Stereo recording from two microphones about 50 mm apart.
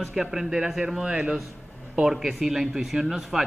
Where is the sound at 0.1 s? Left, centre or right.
Centre.